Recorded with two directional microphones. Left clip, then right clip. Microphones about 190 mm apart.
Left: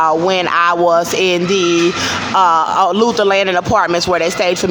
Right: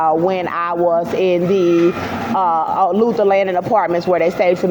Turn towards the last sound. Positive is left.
turn(degrees=0)  # may be behind; listen again after turning